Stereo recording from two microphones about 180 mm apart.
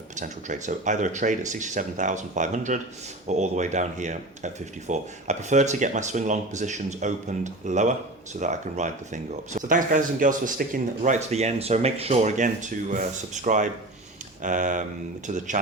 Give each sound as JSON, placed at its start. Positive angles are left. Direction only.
{"t": 0.2, "sound": "speech", "side_deg": -45}